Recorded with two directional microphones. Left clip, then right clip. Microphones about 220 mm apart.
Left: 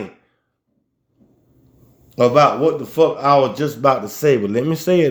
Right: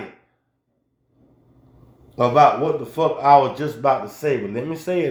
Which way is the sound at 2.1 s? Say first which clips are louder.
Left 2 dB; 45° left (ahead or behind).